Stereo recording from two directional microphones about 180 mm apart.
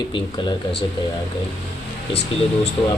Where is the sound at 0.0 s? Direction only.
25° left (ahead or behind).